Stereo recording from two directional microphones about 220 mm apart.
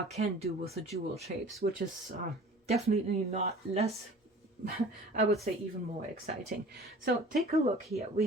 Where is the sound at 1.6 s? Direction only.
40° right (ahead or behind).